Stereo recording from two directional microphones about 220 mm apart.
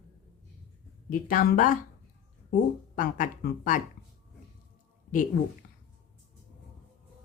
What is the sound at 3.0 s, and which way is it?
Speech, 35° left (ahead or behind).